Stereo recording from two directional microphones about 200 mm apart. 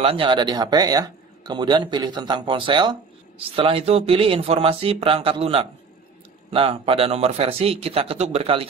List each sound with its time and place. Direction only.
0.0 s speech: 25° right (ahead or behind)